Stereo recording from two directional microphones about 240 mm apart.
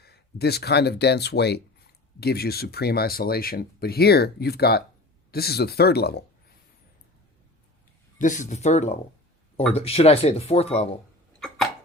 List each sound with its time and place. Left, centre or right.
0.0 s speech: left
8.2 s speech: left
11.3 s hiccup: centre